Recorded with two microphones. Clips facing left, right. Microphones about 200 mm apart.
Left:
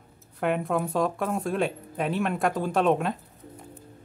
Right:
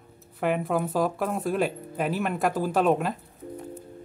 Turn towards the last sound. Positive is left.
turn(degrees=0)  # may be behind; listen again after turning